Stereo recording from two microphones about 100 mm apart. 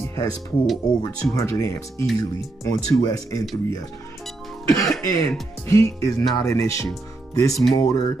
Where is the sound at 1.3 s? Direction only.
30° left (ahead or behind).